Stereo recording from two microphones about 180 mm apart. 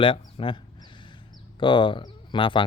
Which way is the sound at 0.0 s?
30° left (ahead or behind).